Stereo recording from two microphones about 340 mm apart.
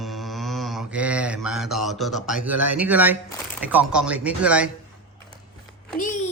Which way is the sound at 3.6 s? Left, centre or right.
Centre.